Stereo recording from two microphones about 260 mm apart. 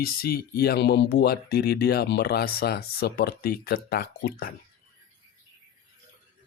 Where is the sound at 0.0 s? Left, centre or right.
Left.